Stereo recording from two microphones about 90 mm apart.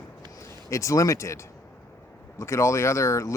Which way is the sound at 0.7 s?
35° left (ahead or behind).